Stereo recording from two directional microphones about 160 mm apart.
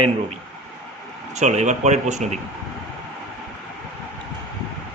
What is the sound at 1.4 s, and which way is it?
Speech, 45° right (ahead or behind).